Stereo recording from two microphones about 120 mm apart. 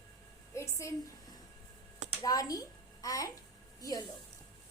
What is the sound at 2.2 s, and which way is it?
A child's voice, 30° left (ahead or behind).